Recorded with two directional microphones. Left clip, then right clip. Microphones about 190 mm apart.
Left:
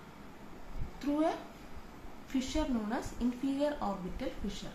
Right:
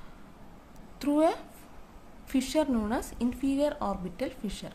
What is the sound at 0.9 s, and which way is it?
A woman's voice, 70° right (ahead or behind).